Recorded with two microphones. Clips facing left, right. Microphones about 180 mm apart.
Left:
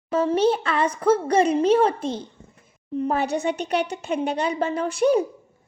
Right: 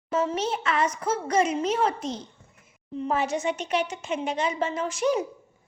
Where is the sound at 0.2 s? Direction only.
30° left (ahead or behind).